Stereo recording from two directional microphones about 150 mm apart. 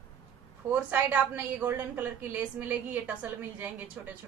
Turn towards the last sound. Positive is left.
turn(degrees=-10)  # may be behind; listen again after turning